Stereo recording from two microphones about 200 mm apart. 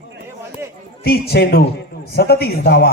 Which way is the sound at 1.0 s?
50° left (ahead or behind).